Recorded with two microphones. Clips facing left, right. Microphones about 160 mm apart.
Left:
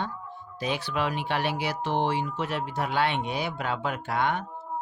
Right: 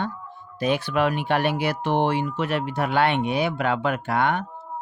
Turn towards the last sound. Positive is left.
turn(degrees=-60)  # may be behind; listen again after turning